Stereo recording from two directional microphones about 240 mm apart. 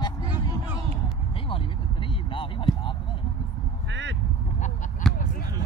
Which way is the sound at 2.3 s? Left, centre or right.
Left.